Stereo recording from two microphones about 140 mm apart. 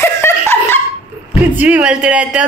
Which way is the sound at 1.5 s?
10° right (ahead or behind).